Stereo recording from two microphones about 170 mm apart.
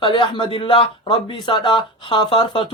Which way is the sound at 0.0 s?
30° left (ahead or behind).